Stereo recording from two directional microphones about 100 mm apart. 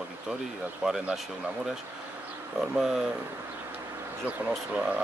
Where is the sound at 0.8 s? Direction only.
5° right (ahead or behind).